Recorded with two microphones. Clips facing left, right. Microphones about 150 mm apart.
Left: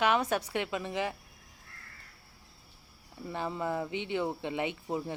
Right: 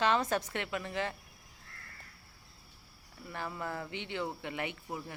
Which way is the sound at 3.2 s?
20° left (ahead or behind).